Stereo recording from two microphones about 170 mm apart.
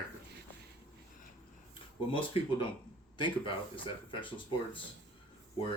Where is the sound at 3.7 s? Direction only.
30° left (ahead or behind).